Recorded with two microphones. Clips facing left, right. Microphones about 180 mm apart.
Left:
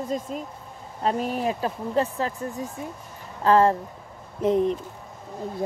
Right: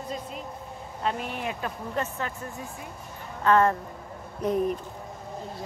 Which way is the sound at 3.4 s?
30° left (ahead or behind).